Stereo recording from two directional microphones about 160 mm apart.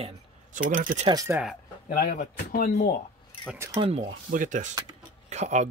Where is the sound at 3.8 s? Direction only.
40° right (ahead or behind).